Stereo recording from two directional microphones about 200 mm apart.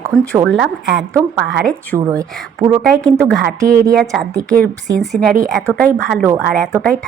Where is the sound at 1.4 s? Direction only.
55° right (ahead or behind).